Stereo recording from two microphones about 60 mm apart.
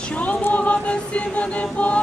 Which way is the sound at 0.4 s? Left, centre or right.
Left.